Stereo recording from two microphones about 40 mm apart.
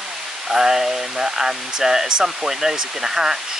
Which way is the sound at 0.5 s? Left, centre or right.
Centre.